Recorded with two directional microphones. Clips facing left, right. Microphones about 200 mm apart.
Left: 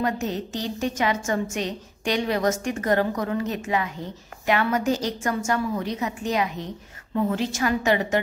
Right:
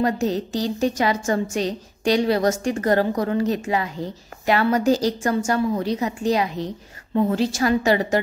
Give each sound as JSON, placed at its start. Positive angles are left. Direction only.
{"t": 0.0, "sound": "a woman's voice", "side_deg": -35}